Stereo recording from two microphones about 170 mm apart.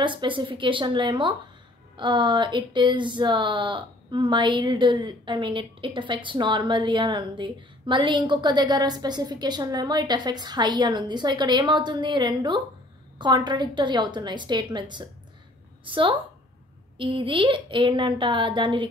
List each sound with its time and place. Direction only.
0.0 s speech: 30° right (ahead or behind)